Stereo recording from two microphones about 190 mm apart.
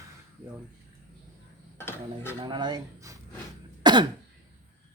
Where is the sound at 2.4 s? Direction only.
25° right (ahead or behind).